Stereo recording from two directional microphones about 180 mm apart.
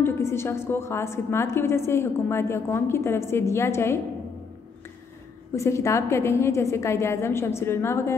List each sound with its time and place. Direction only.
0.0 s a woman's voice: 15° left (ahead or behind)
5.6 s a woman's voice: 15° left (ahead or behind)